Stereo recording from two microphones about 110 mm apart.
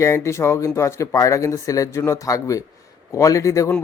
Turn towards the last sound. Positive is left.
turn(degrees=30)  # may be behind; listen again after turning